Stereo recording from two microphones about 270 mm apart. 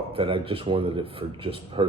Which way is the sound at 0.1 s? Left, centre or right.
Centre.